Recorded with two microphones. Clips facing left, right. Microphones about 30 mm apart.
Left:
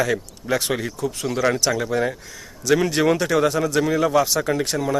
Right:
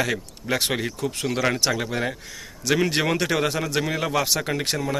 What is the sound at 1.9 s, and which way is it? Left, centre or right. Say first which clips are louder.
A man's voice: left 4 dB; right.